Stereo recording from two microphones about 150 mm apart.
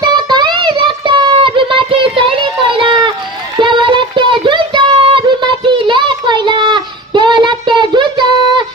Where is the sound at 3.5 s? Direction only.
30° right (ahead or behind).